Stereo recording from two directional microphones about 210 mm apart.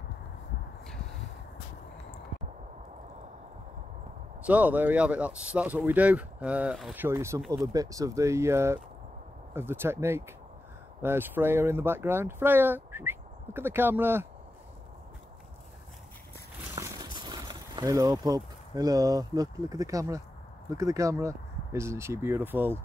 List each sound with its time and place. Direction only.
4.5 s speech: 5° right (ahead or behind)
16.7 s speech: 15° right (ahead or behind)